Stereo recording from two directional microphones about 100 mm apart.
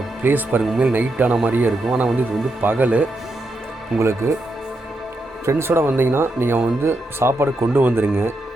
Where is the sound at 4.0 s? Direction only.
25° right (ahead or behind).